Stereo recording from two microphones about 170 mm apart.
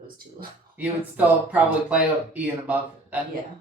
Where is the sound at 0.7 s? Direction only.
10° right (ahead or behind).